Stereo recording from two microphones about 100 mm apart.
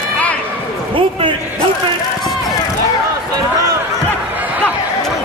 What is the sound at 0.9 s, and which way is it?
Basketball bounce, 60° right (ahead or behind).